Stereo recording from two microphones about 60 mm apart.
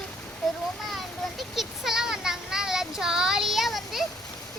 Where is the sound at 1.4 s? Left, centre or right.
Centre.